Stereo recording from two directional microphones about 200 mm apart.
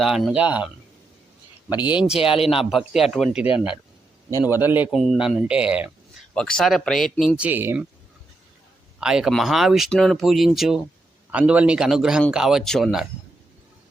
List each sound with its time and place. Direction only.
0.0 s speech: centre (ahead or behind)
2.1 s speech: 30° left (ahead or behind)
2.5 s speech: centre (ahead or behind)
4.4 s speech: 10° right (ahead or behind)
9.0 s speech: 5° right (ahead or behind)